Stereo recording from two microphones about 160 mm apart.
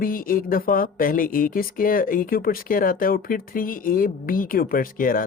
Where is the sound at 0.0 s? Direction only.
60° left (ahead or behind).